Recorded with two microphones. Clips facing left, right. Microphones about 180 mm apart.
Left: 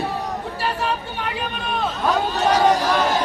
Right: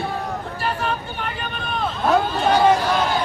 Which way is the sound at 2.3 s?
40° left (ahead or behind).